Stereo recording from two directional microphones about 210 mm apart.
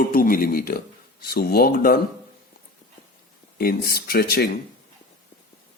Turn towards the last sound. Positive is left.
turn(degrees=50)  # may be behind; listen again after turning